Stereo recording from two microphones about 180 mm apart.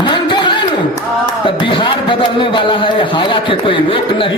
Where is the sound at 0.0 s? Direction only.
25° left (ahead or behind).